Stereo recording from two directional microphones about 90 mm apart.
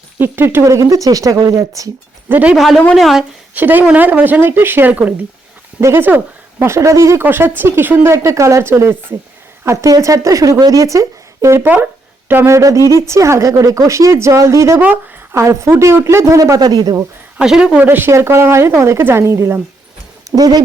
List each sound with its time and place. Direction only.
0.2 s speech: 25° right (ahead or behind); by 1.9 s 40° right (ahead or behind)
2.3 s speech: 15° right (ahead or behind)
2.6 s speech: centre (ahead or behind)
3.5 s speech: 20° right (ahead or behind)
8.1 s speech: 35° right (ahead or behind)
11.6 s speech: 20° right (ahead or behind)
16.6 s speech: 50° right (ahead or behind)
17.3 s speech: 10° right (ahead or behind)
17.7 s speech: 25° right (ahead or behind)
20.3 s speech: 45° right (ahead or behind)